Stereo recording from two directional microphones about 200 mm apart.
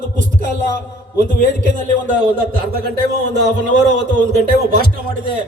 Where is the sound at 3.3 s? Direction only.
60° right (ahead or behind).